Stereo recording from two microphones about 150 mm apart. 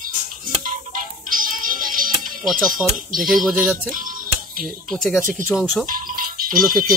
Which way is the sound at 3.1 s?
65° right (ahead or behind).